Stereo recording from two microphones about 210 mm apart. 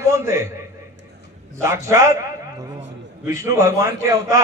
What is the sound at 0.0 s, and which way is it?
Speech, 15° right (ahead or behind).